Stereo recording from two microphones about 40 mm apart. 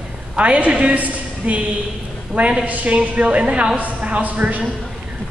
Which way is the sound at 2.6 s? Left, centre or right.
Right.